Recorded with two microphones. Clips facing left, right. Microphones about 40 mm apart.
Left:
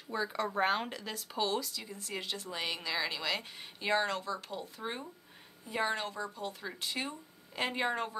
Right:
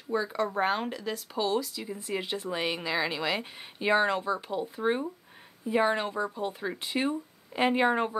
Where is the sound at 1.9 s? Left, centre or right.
Centre.